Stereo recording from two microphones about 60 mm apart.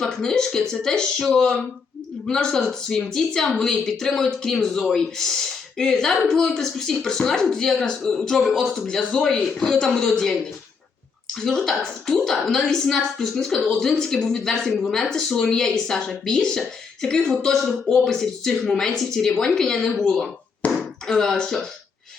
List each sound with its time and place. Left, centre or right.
0.2 s speech: centre
11.3 s speech: centre
20.6 s a sound: left
21.1 s speech: centre